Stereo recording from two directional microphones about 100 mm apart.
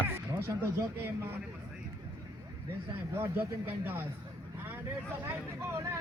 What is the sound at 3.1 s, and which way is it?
Speech, 20° right (ahead or behind).